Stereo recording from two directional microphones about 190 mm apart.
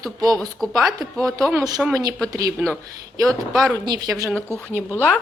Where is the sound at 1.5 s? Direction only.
20° right (ahead or behind).